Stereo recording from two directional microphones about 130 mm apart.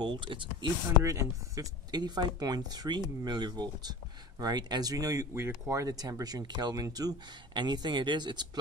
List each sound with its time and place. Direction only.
0.0 s speech: 40° right (ahead or behind)
1.0 s speech: 25° right (ahead or behind)